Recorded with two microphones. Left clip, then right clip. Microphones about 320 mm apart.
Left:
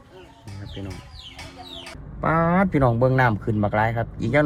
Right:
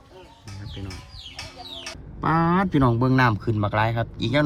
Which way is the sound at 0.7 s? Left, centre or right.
Centre.